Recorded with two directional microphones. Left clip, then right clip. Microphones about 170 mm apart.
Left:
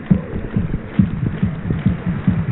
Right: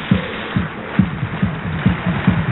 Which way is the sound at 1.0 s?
Centre (ahead or behind).